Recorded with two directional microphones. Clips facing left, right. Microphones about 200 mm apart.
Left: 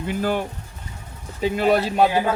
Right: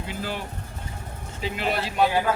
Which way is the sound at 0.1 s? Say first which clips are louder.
Left 10 dB; 50° left (ahead or behind).